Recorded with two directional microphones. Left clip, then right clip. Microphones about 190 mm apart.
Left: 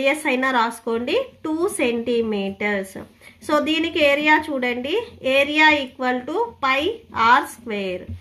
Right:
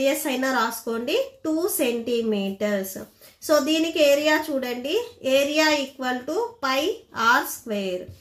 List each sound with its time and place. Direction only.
0.0 s a woman's voice: 40° left (ahead or behind)